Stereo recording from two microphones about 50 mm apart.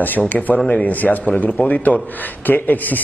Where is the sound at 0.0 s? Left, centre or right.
Left.